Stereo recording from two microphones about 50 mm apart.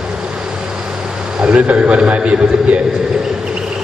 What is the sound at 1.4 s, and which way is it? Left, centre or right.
A man's voice, centre.